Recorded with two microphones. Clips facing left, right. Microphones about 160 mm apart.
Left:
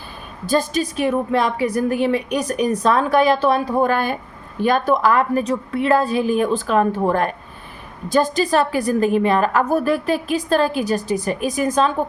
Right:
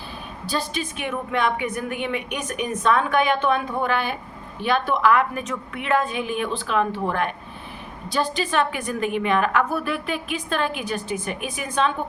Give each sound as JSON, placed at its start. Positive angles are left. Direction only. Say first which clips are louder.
{"t": 0.4, "sound": "a woman's voice", "louder": "left 8 dB", "side_deg": 45}